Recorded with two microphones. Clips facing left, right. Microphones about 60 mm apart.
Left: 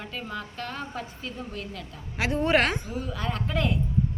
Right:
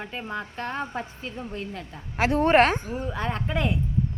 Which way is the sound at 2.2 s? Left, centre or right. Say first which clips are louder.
Right 4 dB; right.